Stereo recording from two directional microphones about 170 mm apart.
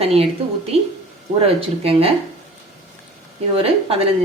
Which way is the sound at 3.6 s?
35° right (ahead or behind).